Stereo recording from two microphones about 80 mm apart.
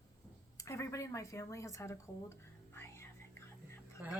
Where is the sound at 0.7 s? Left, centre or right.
Left.